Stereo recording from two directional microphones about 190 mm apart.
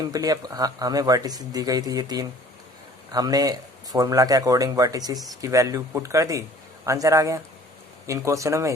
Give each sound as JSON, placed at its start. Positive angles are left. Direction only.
{"t": 0.0, "sound": "speech", "side_deg": -20}